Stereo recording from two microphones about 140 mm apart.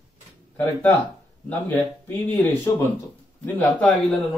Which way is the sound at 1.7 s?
15° left (ahead or behind).